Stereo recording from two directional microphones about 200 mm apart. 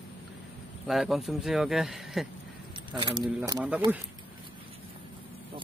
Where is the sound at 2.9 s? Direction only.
25° right (ahead or behind).